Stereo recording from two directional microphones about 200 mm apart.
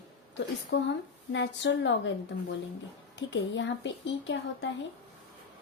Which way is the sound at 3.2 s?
65° left (ahead or behind).